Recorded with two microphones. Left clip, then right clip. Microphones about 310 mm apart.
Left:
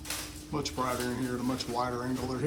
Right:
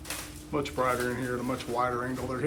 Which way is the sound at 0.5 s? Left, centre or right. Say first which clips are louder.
Right 4 dB; centre.